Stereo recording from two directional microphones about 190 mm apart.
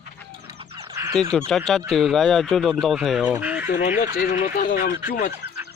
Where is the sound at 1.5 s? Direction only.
Centre (ahead or behind).